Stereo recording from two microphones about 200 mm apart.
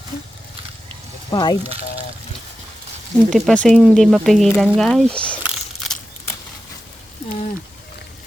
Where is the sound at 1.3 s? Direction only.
20° left (ahead or behind).